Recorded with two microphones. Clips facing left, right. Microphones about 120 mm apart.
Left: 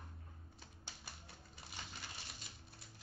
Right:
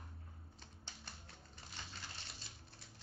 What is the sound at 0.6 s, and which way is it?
Typewriter, 5° left (ahead or behind).